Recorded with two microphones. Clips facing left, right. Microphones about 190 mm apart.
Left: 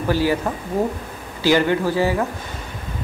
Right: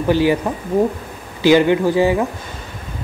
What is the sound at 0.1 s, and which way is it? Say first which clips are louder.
Speech: right 4 dB; 20° right (ahead or behind).